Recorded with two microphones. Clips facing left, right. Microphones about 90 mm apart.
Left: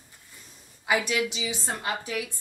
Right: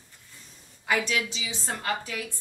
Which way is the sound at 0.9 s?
10° left (ahead or behind).